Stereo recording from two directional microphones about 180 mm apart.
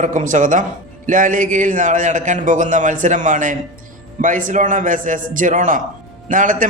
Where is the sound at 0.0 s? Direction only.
45° right (ahead or behind).